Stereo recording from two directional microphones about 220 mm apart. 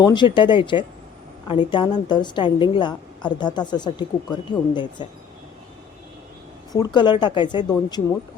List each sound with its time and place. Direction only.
0.0 s a woman's voice: 20° left (ahead or behind)
6.7 s a woman's voice: 20° left (ahead or behind)